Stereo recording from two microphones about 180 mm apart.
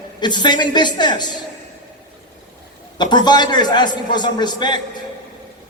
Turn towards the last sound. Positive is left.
turn(degrees=25)  # may be behind; listen again after turning